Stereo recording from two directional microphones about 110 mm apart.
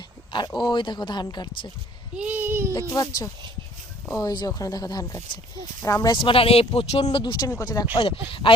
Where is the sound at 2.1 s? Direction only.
15° right (ahead or behind).